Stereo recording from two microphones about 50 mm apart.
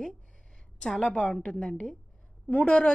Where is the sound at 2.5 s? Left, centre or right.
Left.